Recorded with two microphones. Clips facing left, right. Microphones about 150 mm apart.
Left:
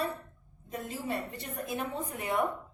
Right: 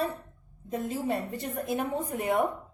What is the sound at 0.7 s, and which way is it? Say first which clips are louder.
A woman's voice: right 6 dB; 45° right (ahead or behind).